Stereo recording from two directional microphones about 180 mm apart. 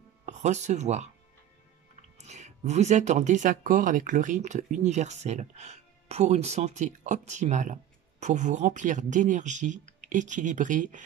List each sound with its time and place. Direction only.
0.2 s speech: 40° right (ahead or behind)